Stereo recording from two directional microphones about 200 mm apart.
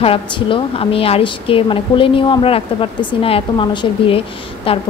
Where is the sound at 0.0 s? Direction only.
30° left (ahead or behind).